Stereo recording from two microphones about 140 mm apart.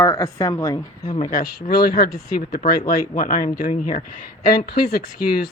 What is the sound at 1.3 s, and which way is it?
Speech, 90° left.